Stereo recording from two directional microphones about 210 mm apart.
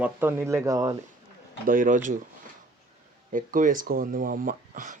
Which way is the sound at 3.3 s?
40° right (ahead or behind).